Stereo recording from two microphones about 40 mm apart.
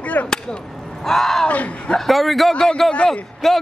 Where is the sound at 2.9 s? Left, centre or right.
Left.